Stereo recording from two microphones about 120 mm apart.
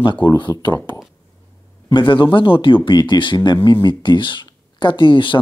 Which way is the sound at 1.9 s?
40° left (ahead or behind).